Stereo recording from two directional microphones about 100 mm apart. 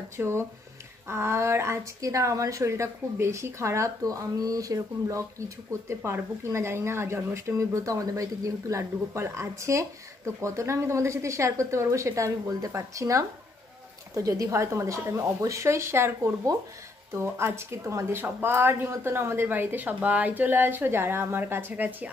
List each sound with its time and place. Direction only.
0.2 s speech: 25° right (ahead or behind)